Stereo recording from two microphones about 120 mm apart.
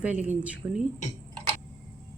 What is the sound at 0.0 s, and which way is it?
Speech, 10° right (ahead or behind).